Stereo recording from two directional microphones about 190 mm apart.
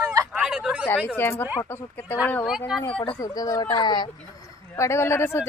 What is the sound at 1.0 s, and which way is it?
Speech, 10° left (ahead or behind).